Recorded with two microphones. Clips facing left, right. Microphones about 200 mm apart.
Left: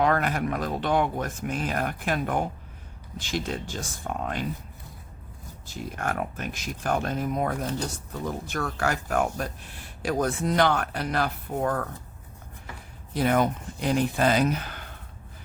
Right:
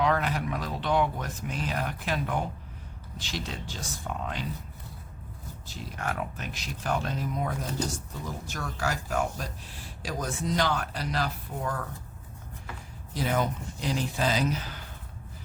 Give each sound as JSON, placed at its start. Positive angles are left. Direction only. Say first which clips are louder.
{"t": 0.0, "sound": "speech", "louder": "left 3 dB", "side_deg": 50}
{"t": 5.6, "sound": "speech", "louder": "left 4 dB", "side_deg": 50}
{"t": 13.1, "sound": "speech", "louder": "left 5 dB", "side_deg": 60}